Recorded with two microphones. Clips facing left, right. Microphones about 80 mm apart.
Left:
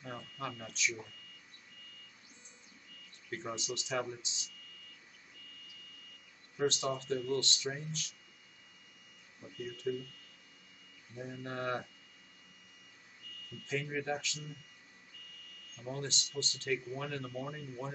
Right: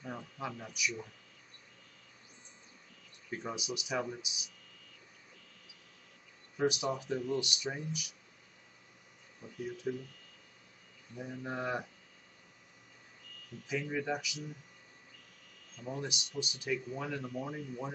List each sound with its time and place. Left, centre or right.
0.0 s speech: centre
3.3 s speech: centre
6.5 s speech: centre
9.7 s speech: centre
11.1 s speech: centre
13.7 s speech: centre
15.8 s speech: centre